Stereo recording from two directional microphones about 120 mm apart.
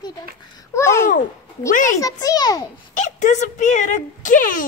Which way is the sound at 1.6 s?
90° left.